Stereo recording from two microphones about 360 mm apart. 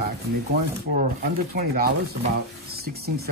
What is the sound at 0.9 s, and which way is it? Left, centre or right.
Speech, right.